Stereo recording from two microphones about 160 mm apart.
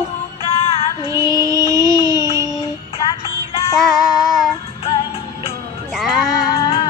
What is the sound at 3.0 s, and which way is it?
Music, 30° left (ahead or behind).